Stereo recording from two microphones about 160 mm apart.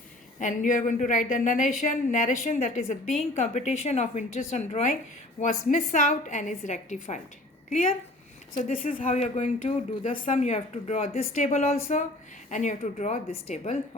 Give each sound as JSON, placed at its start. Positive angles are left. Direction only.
{"t": 0.3, "sound": "a woman's voice", "side_deg": 55}
{"t": 8.6, "sound": "a woman's voice", "side_deg": 55}